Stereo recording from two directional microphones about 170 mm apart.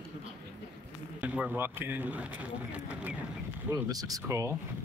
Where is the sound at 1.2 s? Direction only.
10° right (ahead or behind).